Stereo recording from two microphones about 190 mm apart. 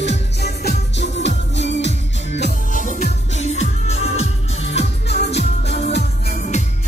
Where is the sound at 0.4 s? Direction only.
55° left (ahead or behind).